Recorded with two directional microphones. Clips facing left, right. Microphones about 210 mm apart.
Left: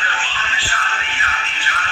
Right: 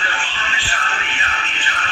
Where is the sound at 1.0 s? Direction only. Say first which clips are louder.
Even; 15° right (ahead or behind).